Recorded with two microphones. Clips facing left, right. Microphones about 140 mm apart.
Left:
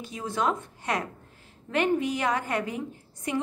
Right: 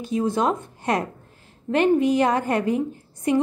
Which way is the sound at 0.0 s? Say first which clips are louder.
Right 7 dB; 25° right (ahead or behind).